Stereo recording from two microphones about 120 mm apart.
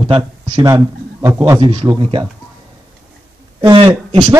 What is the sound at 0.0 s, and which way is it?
Speech, 45° right (ahead or behind).